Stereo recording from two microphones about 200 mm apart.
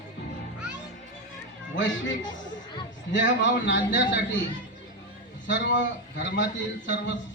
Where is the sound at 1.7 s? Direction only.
65° left (ahead or behind).